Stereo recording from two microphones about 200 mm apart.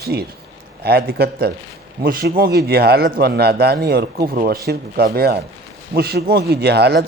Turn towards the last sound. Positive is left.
turn(degrees=-55)  # may be behind; listen again after turning